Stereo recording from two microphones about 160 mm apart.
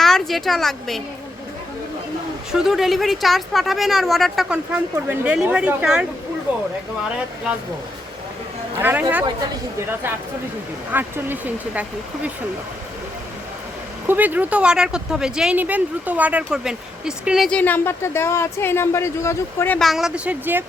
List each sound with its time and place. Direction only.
0.0 s a woman's voice: centre (ahead or behind)
2.5 s speech: centre (ahead or behind)
8.7 s speech: 10° right (ahead or behind)
14.1 s speech: 10° right (ahead or behind); by 19.8 s 15° left (ahead or behind)
19.8 s speech: centre (ahead or behind)